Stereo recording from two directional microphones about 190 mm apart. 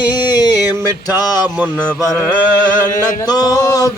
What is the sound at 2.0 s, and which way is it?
Mantra, 20° left (ahead or behind).